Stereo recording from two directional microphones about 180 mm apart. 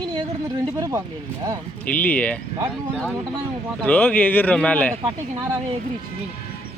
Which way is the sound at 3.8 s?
10° left (ahead or behind).